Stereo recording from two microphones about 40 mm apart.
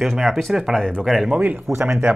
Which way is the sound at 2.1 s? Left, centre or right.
Right.